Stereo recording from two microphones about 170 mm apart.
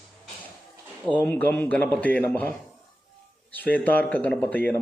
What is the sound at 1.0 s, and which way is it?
Speech, 10° left (ahead or behind).